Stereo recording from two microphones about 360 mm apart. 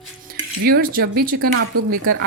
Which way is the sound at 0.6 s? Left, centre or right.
Right.